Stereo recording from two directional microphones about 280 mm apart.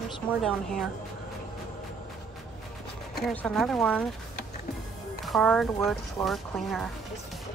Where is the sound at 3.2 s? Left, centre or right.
Centre.